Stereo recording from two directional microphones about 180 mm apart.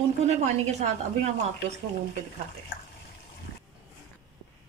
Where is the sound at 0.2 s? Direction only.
40° right (ahead or behind).